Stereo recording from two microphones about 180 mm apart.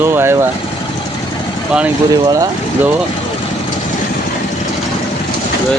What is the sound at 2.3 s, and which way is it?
Speech, 20° right (ahead or behind).